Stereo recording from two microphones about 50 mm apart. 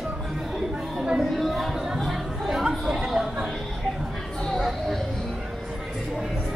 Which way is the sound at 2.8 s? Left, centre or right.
Centre.